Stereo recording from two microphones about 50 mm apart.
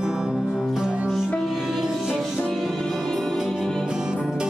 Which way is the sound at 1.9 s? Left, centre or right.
Centre.